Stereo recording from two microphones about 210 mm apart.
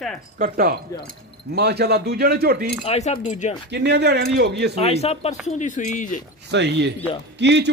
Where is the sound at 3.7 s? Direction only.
55° right (ahead or behind).